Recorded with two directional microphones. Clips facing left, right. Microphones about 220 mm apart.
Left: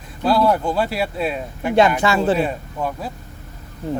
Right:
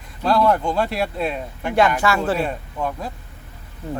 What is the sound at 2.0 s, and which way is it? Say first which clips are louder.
Speech: left 3 dB; 20° left (ahead or behind).